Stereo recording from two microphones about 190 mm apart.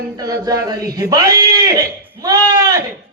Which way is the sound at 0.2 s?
20° right (ahead or behind).